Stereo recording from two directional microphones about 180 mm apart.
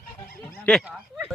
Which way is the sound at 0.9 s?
5° right (ahead or behind).